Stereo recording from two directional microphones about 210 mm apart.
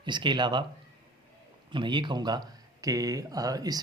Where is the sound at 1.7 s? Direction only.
20° right (ahead or behind).